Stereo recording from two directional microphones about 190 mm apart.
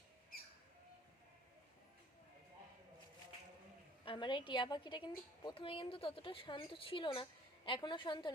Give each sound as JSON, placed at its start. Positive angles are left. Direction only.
{"t": 4.0, "sound": "a woman's voice", "side_deg": 25}